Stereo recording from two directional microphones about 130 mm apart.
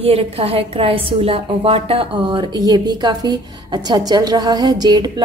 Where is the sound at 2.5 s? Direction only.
30° right (ahead or behind).